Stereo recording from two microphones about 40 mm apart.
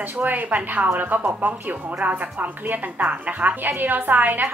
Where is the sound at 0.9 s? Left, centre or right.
Right.